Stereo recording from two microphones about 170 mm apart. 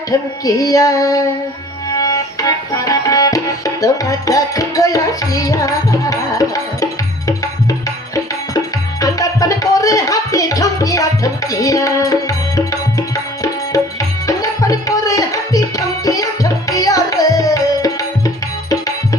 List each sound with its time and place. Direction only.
0.1 s music: 20° left (ahead or behind)
2.0 s tabla: 20° left (ahead or behind)
9.0 s music: 20° left (ahead or behind)